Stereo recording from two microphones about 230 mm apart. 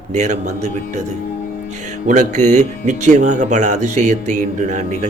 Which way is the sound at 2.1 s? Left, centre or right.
Right.